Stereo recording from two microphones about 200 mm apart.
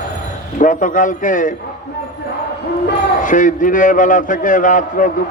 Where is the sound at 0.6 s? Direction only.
40° left (ahead or behind).